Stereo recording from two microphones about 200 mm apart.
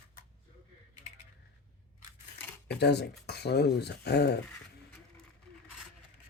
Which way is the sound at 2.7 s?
55° left (ahead or behind).